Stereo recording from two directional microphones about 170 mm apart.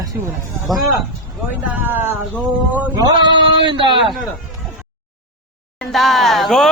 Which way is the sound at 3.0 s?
25° right (ahead or behind).